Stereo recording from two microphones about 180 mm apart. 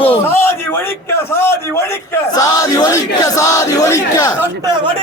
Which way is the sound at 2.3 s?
20° left (ahead or behind).